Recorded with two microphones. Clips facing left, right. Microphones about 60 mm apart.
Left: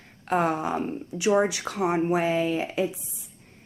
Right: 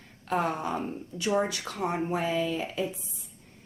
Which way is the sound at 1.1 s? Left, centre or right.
Left.